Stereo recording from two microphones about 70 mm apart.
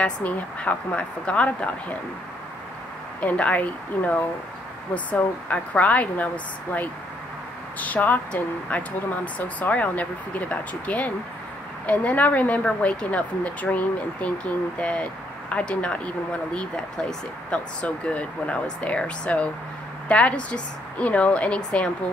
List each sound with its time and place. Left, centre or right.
0.0 s speech: left
3.2 s speech: centre